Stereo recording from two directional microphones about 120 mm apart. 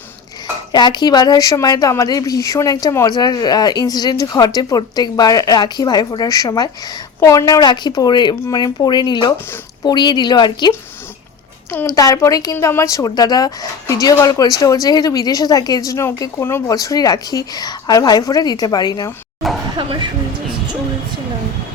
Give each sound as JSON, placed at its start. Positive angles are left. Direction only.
{"t": 0.7, "sound": "speech", "side_deg": 35}
{"t": 11.9, "sound": "speech", "side_deg": 30}
{"t": 19.7, "sound": "a sound", "side_deg": -40}